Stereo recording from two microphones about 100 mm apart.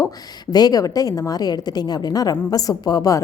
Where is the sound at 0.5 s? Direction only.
40° left (ahead or behind).